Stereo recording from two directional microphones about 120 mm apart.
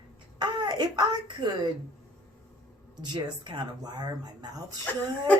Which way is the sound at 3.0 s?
35° right (ahead or behind).